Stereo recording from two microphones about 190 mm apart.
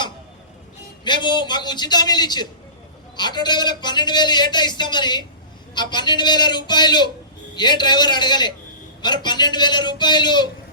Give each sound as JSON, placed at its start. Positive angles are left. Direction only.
{"t": 1.0, "sound": "a man's voice", "side_deg": 25}